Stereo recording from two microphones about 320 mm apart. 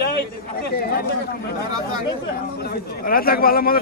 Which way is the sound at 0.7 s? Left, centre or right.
Left.